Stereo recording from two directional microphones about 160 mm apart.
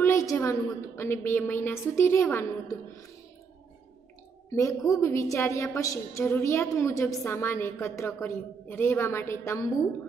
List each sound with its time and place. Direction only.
0.0 s a woman's voice: 20° left (ahead or behind)
4.5 s a woman's voice: 20° left (ahead or behind)